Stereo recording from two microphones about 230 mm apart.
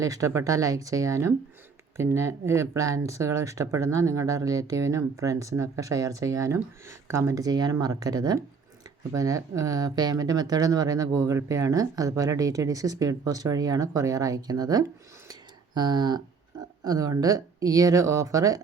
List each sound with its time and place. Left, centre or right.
0.0 s speech: centre
15.3 s a sound: centre
16.8 s speech: centre